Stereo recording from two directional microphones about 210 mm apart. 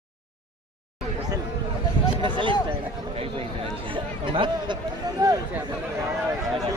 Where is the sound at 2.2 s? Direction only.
25° right (ahead or behind).